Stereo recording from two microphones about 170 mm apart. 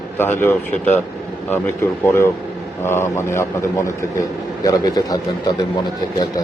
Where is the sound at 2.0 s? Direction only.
15° left (ahead or behind).